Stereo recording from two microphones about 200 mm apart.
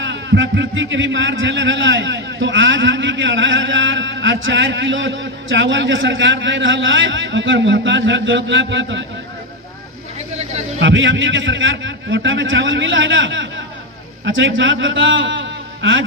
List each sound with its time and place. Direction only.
0.0 s a man's voice: 65° right (ahead or behind)
10.8 s a man's voice: 70° right (ahead or behind)